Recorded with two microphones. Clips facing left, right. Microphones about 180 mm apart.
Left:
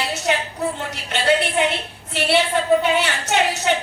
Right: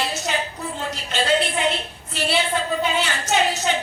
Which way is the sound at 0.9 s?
65° left (ahead or behind).